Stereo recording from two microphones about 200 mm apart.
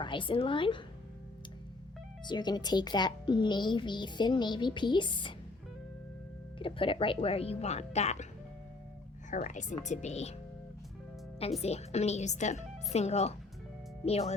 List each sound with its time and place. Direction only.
0.0 s a woman's voice: 25° left (ahead or behind)
2.2 s a woman's voice: 20° left (ahead or behind)
6.6 s a woman's voice: 25° left (ahead or behind)
9.3 s speech: 40° left (ahead or behind)
11.6 s speech: 30° left (ahead or behind)